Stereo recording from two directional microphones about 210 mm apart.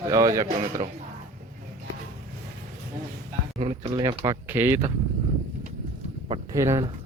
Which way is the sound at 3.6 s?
25° right (ahead or behind).